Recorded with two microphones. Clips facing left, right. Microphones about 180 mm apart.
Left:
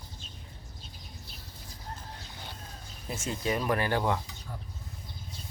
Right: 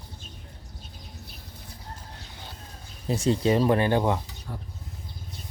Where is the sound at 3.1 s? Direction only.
35° right (ahead or behind).